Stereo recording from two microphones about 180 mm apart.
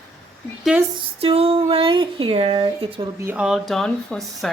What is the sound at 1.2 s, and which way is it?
Speech, 35° right (ahead or behind).